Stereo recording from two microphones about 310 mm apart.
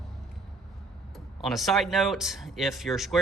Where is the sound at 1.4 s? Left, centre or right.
Centre.